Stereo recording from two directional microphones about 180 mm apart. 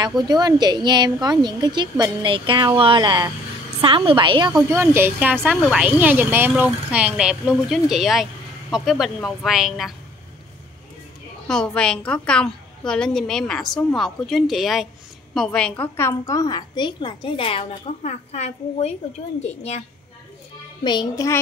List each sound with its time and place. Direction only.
0.0 s a woman's voice: 20° right (ahead or behind)
4.6 s a woman's voice: 15° right (ahead or behind)
11.4 s a woman's voice: 5° left (ahead or behind); by 19.8 s 40° left (ahead or behind)
20.8 s a woman's voice: 25° left (ahead or behind)